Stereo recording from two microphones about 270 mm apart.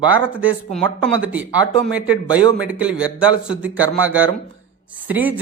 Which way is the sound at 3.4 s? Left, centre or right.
Centre.